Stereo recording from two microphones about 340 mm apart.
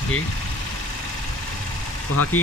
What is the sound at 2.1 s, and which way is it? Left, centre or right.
Speech, left.